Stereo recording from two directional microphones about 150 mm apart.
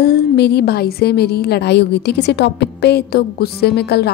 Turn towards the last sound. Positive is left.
turn(degrees=90)